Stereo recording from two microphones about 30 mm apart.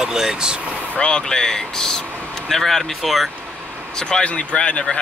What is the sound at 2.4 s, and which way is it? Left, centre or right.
Speech, centre.